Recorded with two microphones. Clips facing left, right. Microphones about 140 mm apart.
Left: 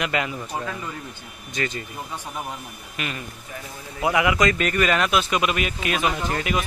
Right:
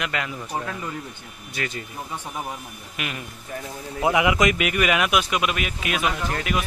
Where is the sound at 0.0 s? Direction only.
5° left (ahead or behind).